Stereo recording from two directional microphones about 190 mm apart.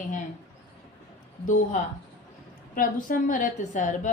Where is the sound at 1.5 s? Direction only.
45° left (ahead or behind).